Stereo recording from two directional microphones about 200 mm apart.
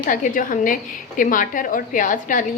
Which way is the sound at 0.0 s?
40° left (ahead or behind).